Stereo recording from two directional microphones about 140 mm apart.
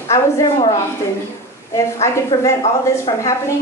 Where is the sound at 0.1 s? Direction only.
25° left (ahead or behind).